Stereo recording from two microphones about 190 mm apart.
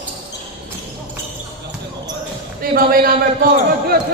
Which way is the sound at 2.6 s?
50° right (ahead or behind).